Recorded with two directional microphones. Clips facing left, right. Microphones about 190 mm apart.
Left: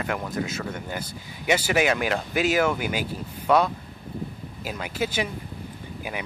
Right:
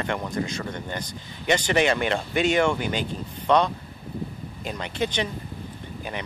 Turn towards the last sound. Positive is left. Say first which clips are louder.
# even
turn(degrees=5)  # may be behind; listen again after turning